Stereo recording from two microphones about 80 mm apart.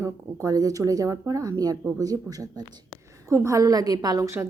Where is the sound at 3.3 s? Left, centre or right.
Right.